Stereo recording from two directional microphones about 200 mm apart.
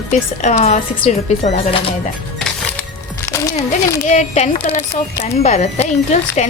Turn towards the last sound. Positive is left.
turn(degrees=35)  # may be behind; listen again after turning